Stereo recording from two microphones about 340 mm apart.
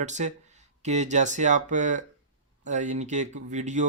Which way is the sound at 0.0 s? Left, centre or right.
Right.